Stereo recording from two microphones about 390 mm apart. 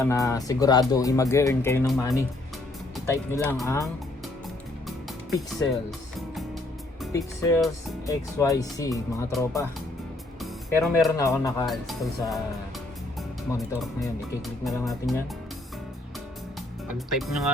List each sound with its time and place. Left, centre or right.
0.0 s speech: centre
7.0 s speech: centre
14.0 s speech: centre
17.1 s speech: centre